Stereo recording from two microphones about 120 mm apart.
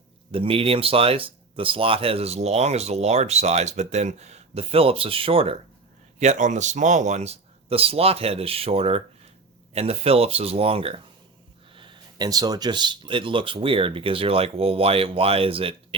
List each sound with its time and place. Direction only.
0.3 s speech: 50° right (ahead or behind)
6.1 s speech: 80° right; by 16.0 s 50° right (ahead or behind)